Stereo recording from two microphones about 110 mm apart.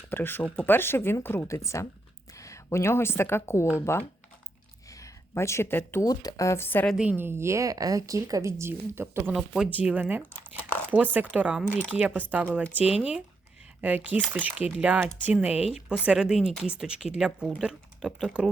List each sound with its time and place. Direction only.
0.1 s a woman's voice: 20° left (ahead or behind)
6.1 s speech: 35° left (ahead or behind)
7.0 s speech: 15° right (ahead or behind)
9.3 s speech: 5° right (ahead or behind)